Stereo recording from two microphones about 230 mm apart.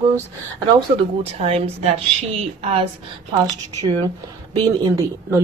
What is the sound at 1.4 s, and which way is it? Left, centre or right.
Speech, right.